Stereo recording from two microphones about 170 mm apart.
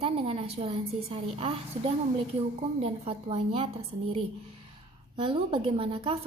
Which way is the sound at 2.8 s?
35° right (ahead or behind).